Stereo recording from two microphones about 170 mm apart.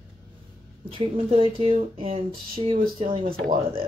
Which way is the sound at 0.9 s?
35° right (ahead or behind).